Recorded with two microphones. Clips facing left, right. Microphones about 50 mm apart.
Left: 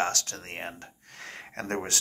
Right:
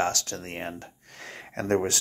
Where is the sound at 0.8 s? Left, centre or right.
Left.